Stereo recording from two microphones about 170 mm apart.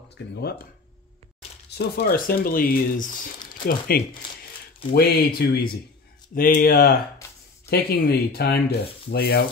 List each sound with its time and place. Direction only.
0.2 s speech: 90° left
1.8 s speech: 60° left (ahead or behind)